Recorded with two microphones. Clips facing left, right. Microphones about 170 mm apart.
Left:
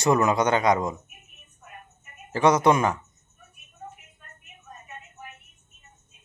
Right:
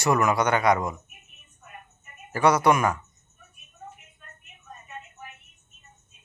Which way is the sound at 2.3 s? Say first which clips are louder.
Left 1 dB; 20° left (ahead or behind).